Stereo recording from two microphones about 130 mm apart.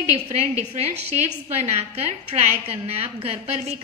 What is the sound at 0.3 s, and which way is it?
A woman's voice, 55° right (ahead or behind).